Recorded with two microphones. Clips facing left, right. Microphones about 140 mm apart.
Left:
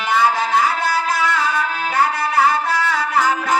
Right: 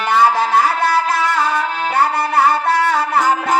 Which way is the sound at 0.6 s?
60° right (ahead or behind).